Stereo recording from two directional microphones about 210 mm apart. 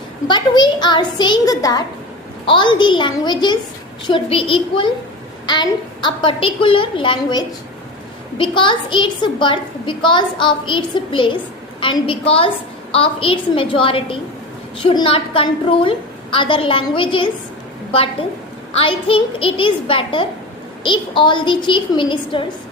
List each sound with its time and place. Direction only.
0.3 s a woman's voice: 20° left (ahead or behind)